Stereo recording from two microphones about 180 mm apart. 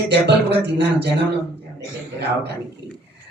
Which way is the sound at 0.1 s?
70° right (ahead or behind).